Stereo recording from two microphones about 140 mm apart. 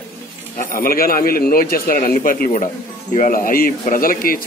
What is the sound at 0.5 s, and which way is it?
Speech, 90° left.